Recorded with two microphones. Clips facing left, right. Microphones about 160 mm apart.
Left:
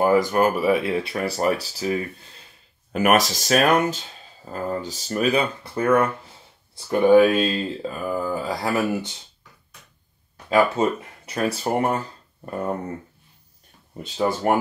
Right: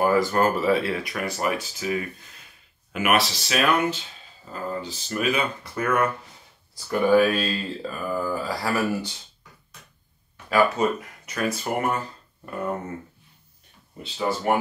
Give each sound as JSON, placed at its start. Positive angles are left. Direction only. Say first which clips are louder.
{"t": 0.0, "sound": "speech", "louder": "left 2 dB", "side_deg": 20}
{"t": 10.5, "sound": "speech", "louder": "left 2 dB", "side_deg": 25}
{"t": 14.0, "sound": "speech", "louder": "left 3 dB", "side_deg": 45}